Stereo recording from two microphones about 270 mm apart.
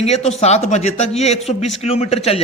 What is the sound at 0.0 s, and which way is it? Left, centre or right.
Speech, left.